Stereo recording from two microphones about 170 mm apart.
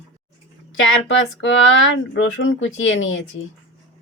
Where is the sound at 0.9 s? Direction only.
90° left.